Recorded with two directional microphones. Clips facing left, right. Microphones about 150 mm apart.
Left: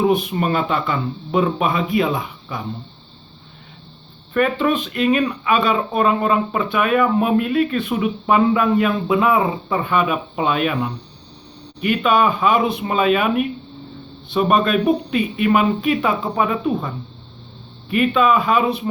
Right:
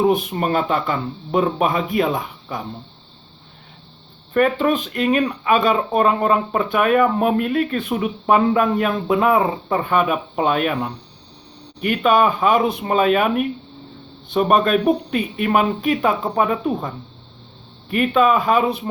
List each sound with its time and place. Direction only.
0.0 s speech: 40° right (ahead or behind)
4.4 s speech: 45° right (ahead or behind)